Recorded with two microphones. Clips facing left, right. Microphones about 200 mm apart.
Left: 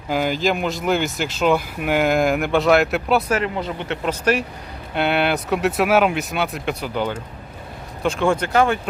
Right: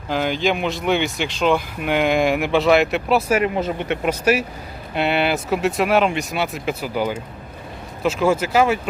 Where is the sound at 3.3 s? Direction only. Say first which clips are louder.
Right 3 dB; 20° right (ahead or behind).